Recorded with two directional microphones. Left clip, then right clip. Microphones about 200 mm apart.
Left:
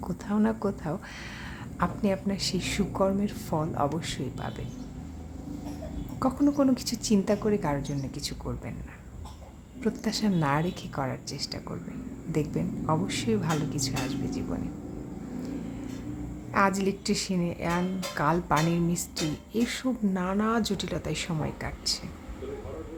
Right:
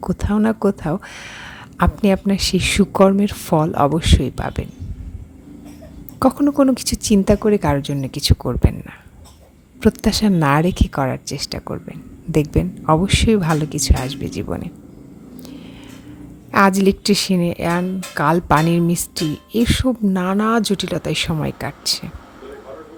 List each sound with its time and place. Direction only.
0.0 s speech: 40° right (ahead or behind)
6.1 s speech: 40° right (ahead or behind)
9.8 s speech: 40° right (ahead or behind)
16.5 s speech: 40° right (ahead or behind)